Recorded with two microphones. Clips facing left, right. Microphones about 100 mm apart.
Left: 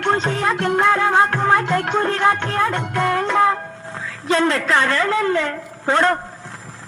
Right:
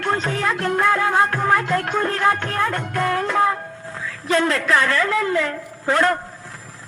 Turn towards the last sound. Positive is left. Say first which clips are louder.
# left 1 dB
turn(degrees=30)  # may be behind; listen again after turning